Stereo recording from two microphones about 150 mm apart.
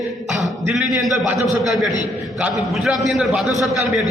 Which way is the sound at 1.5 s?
Centre (ahead or behind).